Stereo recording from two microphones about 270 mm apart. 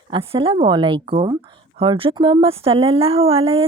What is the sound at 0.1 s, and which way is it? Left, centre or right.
A woman's voice, centre.